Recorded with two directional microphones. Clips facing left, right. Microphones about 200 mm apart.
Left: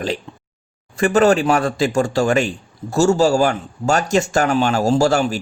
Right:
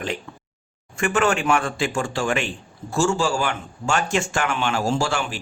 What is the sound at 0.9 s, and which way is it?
A man's voice, 35° left (ahead or behind).